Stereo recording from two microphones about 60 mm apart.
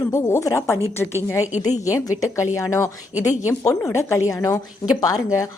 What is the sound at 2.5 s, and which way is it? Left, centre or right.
Speech, left.